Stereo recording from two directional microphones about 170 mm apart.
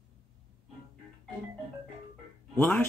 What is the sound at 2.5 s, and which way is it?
Speech, 5° left (ahead or behind).